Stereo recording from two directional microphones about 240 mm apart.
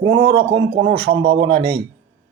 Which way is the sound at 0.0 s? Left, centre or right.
Right.